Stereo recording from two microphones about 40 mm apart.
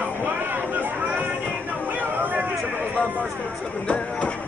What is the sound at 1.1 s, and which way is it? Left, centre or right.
Music, right.